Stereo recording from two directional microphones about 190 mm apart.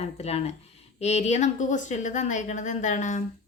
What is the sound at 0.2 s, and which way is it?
Speech, 35° left (ahead or behind).